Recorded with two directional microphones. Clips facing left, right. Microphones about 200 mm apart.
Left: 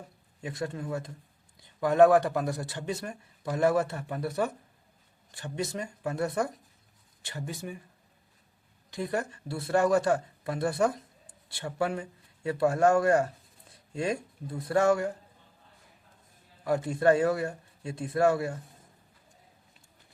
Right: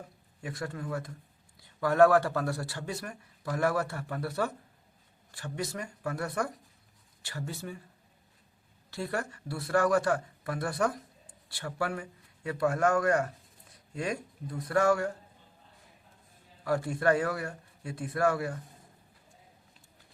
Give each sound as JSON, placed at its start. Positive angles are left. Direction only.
{"t": 0.4, "sound": "speech", "side_deg": 25}
{"t": 8.9, "sound": "speech", "side_deg": 20}
{"t": 16.6, "sound": "speech", "side_deg": 20}